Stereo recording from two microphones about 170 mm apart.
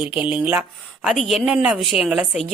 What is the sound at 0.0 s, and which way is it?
A woman's voice, 10° right (ahead or behind).